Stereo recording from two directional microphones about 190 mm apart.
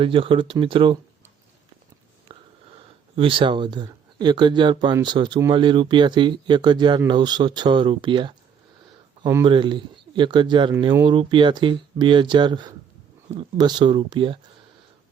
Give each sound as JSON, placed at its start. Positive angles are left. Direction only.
{"t": 0.0, "sound": "speech", "side_deg": -30}
{"t": 2.7, "sound": "speech", "side_deg": -30}